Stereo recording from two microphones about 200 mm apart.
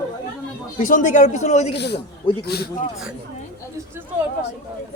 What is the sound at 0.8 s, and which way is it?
Speech, 40° left (ahead or behind).